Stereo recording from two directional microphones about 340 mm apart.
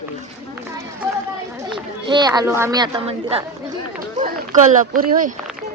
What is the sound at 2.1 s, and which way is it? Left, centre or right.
A child's voice, centre.